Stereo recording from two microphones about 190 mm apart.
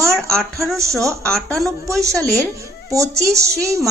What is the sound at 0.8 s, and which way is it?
Speech, 15° right (ahead or behind).